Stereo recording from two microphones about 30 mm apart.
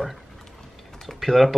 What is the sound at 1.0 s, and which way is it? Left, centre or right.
Speech, centre.